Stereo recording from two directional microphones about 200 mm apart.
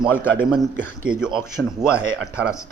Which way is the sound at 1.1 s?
5° right (ahead or behind).